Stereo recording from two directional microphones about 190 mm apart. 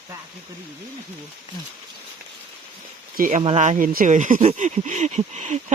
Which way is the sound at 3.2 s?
40° right (ahead or behind).